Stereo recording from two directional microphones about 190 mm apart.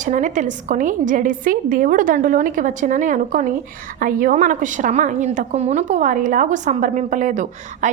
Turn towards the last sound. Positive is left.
turn(degrees=-40)  # may be behind; listen again after turning